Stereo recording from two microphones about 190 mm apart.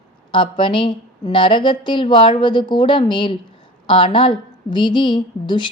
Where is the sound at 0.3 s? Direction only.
25° left (ahead or behind).